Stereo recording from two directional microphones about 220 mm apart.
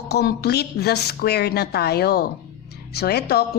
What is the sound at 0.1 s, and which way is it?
A woman's voice, 45° left (ahead or behind).